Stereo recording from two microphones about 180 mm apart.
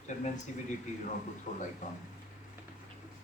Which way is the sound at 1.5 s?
45° left (ahead or behind).